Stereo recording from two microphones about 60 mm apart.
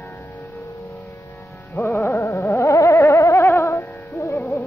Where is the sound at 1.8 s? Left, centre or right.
Left.